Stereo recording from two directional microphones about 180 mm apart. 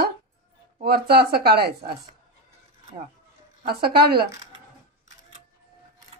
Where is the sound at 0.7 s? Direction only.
60° right (ahead or behind).